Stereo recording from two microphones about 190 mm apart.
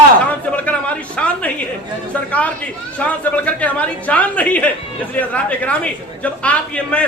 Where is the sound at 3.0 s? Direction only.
5° left (ahead or behind).